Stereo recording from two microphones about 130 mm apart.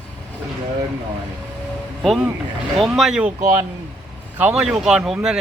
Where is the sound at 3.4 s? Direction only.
20° right (ahead or behind).